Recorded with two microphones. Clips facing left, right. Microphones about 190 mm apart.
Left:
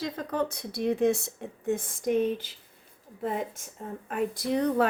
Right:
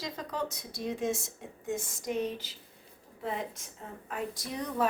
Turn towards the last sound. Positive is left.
turn(degrees=65)  # may be behind; listen again after turning